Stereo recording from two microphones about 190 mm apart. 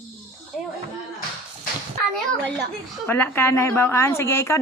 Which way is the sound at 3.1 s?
10° left (ahead or behind).